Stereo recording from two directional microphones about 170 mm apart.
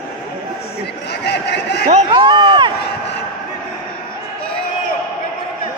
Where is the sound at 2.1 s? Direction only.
25° right (ahead or behind).